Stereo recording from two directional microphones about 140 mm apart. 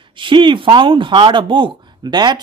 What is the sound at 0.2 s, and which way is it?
Speech, 35° right (ahead or behind).